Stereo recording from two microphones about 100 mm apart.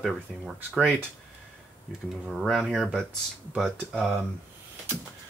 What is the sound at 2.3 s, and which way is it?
Speech, centre (ahead or behind).